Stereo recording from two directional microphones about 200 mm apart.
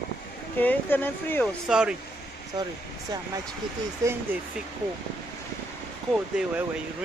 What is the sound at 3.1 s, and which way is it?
Speech, 20° right (ahead or behind).